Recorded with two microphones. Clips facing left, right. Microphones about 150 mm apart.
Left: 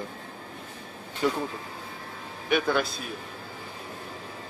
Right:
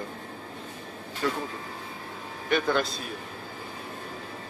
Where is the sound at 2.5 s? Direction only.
5° left (ahead or behind).